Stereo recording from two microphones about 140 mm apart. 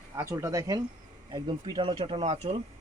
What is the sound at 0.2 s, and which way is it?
Speech, 20° right (ahead or behind).